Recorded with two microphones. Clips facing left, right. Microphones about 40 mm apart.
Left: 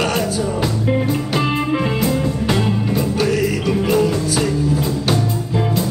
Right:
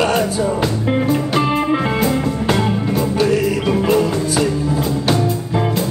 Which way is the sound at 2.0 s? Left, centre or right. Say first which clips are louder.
Right 1 dB; right.